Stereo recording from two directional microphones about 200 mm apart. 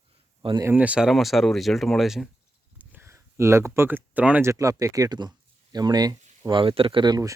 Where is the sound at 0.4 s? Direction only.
20° right (ahead or behind).